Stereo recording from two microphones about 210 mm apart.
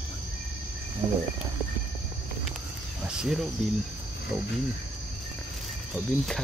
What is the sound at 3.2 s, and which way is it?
Speech, centre (ahead or behind).